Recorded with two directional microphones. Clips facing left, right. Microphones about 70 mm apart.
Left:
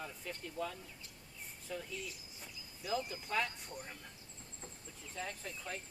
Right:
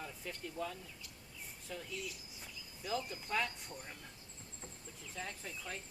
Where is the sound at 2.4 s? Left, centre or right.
Centre.